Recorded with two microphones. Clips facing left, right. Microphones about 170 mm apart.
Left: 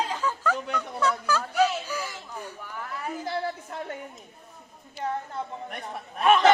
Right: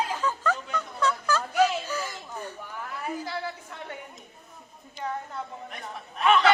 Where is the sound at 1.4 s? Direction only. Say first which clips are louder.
Right 2 dB; 10° right (ahead or behind).